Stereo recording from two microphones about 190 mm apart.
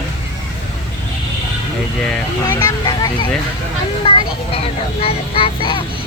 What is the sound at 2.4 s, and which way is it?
Speech, 15° left (ahead or behind).